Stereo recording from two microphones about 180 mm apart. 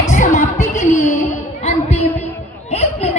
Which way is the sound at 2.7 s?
35° left (ahead or behind).